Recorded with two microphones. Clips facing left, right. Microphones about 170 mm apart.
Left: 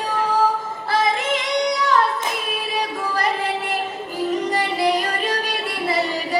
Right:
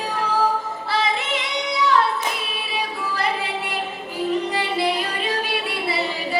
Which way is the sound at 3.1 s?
45° left (ahead or behind).